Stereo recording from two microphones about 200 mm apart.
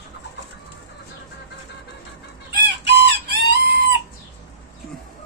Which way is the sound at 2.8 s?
55° right (ahead or behind).